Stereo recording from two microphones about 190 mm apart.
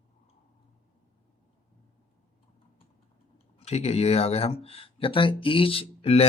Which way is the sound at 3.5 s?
35° left (ahead or behind).